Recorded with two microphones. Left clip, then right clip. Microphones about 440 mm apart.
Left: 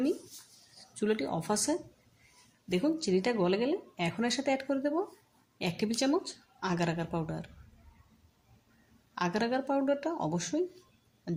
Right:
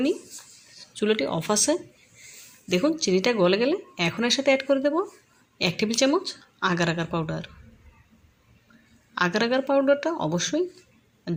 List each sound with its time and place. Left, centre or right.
0.9 s a woman's voice: right
9.1 s a woman's voice: right